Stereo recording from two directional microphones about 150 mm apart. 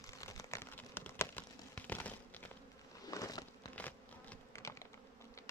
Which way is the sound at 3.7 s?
10° left (ahead or behind).